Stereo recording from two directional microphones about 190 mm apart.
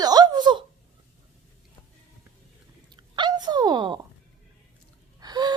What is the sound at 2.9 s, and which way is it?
Dog, 25° right (ahead or behind).